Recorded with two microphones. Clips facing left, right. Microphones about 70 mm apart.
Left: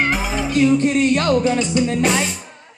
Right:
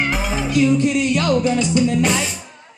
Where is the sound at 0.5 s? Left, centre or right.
Left.